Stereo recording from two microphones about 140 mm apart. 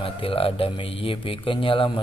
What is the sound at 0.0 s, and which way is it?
Speech, 40° left (ahead or behind).